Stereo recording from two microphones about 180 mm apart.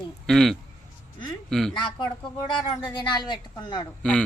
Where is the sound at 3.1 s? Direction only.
25° left (ahead or behind).